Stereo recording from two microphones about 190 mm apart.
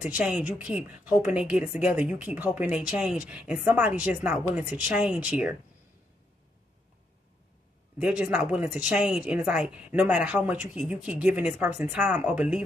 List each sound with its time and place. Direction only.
0.0 s speech: 10° right (ahead or behind)
8.0 s speech: 5° right (ahead or behind)